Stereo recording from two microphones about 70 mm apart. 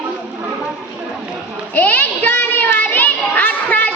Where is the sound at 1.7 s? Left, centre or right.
Left.